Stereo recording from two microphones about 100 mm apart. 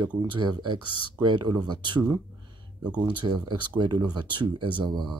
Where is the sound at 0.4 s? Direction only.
50° right (ahead or behind).